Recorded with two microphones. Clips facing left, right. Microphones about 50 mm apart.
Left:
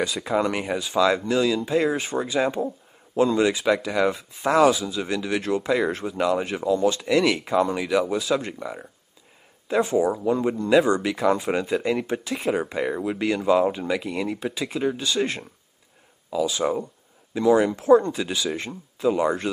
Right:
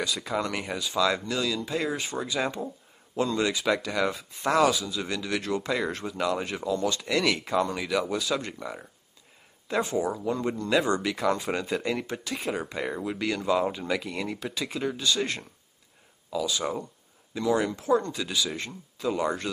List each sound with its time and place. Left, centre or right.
0.0 s speech: centre